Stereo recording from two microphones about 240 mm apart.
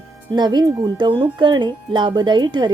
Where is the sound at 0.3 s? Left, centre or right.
Centre.